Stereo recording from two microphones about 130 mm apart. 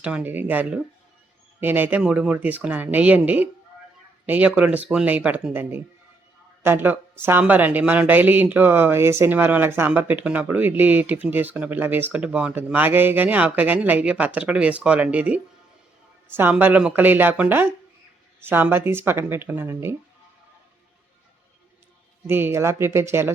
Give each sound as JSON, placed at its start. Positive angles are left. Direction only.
{"t": 0.0, "sound": "speech", "side_deg": -10}
{"t": 22.3, "sound": "speech", "side_deg": -15}